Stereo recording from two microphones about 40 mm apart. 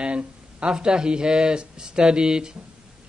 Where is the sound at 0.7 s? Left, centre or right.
Centre.